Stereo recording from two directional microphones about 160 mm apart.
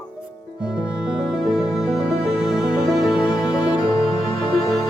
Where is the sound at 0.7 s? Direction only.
5° right (ahead or behind).